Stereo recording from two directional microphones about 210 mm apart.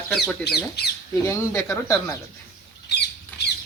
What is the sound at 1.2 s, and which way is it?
Speech, 15° left (ahead or behind).